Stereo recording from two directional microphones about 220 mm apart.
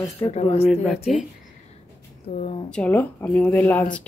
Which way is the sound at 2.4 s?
25° left (ahead or behind).